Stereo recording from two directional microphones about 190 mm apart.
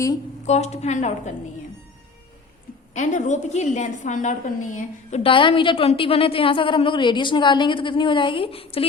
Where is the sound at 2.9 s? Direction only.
40° left (ahead or behind).